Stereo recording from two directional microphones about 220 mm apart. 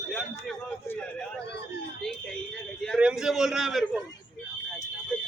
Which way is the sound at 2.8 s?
Centre (ahead or behind).